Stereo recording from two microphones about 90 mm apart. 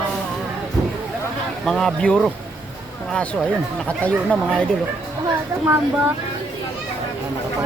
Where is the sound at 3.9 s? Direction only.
15° left (ahead or behind).